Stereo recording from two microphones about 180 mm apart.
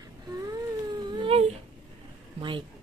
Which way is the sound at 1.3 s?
35° right (ahead or behind).